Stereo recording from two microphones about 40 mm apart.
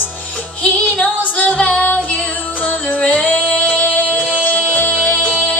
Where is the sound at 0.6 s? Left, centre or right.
Left.